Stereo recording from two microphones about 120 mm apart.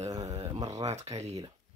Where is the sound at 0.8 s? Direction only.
70° right (ahead or behind).